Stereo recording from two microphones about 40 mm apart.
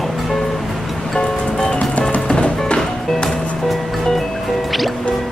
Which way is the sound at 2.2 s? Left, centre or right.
Left.